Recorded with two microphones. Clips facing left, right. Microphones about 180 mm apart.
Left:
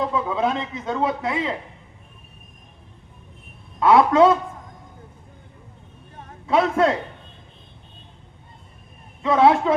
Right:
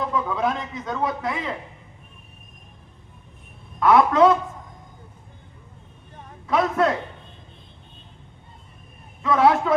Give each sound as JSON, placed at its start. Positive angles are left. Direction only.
{"t": 0.1, "sound": "speech", "side_deg": 25}
{"t": 3.8, "sound": "speech", "side_deg": 25}
{"t": 6.5, "sound": "speech", "side_deg": 25}
{"t": 9.2, "sound": "speech", "side_deg": 25}